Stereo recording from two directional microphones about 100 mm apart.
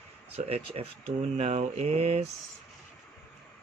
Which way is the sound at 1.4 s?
90° right.